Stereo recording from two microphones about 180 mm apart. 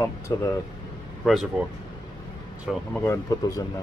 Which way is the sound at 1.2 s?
Centre (ahead or behind).